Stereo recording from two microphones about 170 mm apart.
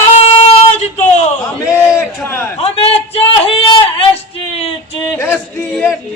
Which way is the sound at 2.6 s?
35° left (ahead or behind).